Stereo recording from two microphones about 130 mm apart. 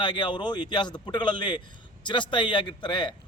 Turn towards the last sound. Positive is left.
turn(degrees=35)  # may be behind; listen again after turning